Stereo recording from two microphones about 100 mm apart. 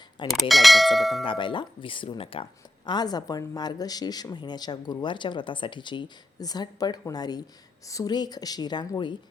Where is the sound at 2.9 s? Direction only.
45° left (ahead or behind).